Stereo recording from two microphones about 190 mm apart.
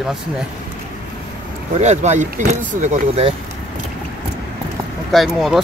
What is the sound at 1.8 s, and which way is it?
Speech, 35° right (ahead or behind).